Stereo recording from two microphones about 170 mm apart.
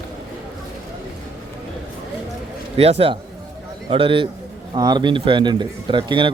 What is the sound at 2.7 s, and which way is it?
A man's voice, 35° right (ahead or behind).